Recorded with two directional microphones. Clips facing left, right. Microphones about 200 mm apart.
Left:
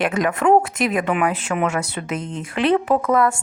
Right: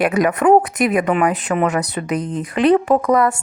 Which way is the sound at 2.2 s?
35° right (ahead or behind).